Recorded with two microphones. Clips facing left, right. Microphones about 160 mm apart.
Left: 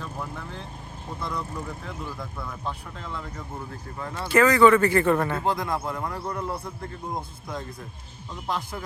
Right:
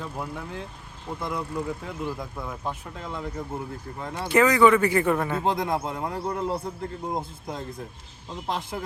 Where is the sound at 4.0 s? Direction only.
20° right (ahead or behind).